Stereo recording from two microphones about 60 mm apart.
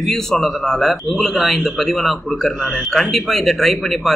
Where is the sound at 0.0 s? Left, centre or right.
Centre.